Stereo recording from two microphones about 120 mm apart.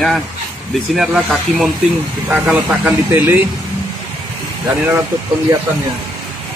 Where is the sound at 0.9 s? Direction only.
5° right (ahead or behind).